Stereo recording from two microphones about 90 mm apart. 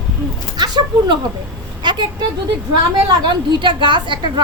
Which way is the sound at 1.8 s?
55° right (ahead or behind).